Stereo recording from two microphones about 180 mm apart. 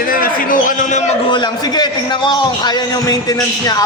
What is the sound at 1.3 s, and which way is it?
A man's voice, 25° left (ahead or behind).